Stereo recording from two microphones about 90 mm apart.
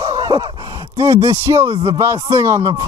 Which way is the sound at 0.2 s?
65° right (ahead or behind).